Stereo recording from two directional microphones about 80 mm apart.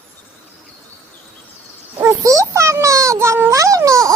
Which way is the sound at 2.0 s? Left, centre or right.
Right.